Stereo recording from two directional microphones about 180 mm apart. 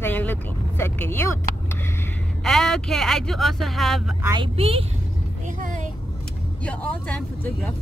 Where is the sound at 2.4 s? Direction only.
Centre (ahead or behind).